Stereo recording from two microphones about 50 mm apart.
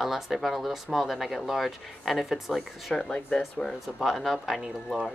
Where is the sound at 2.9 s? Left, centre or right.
Centre.